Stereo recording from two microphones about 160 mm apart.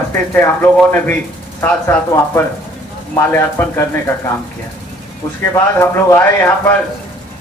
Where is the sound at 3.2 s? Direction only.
15° left (ahead or behind).